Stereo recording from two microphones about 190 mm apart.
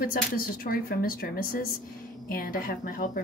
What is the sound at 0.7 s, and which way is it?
Speech, 50° left (ahead or behind).